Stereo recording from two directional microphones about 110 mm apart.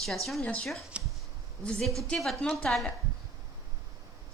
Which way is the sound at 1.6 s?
5° left (ahead or behind).